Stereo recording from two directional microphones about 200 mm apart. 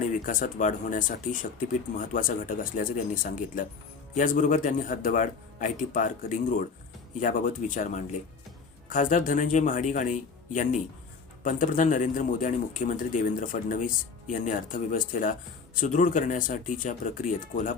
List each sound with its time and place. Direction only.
0.2 s speech: 40° left (ahead or behind)